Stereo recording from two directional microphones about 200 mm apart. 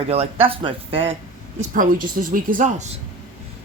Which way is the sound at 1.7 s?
45° right (ahead or behind).